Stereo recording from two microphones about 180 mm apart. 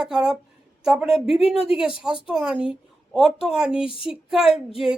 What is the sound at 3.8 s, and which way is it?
Speech, 30° left (ahead or behind).